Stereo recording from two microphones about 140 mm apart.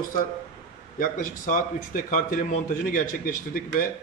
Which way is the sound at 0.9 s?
75° left (ahead or behind).